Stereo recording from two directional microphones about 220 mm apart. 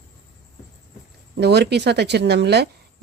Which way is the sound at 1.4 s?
50° right (ahead or behind).